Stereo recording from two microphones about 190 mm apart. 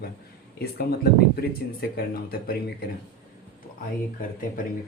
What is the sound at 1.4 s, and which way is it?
Speech, 55° left (ahead or behind).